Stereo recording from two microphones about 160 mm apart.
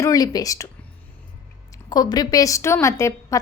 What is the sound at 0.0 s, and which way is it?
Speech, 20° left (ahead or behind).